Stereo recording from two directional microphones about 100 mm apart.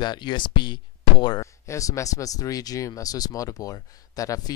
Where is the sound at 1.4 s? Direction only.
30° left (ahead or behind).